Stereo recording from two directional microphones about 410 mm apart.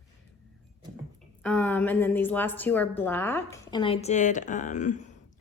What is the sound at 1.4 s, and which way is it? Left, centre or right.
A woman's voice, centre.